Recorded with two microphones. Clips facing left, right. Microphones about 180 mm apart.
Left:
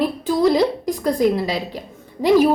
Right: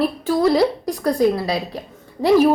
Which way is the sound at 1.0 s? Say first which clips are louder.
Right 1 dB; 20° left (ahead or behind).